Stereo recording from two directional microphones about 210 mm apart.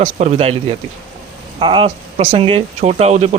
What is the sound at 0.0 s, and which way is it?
Speech, 35° right (ahead or behind).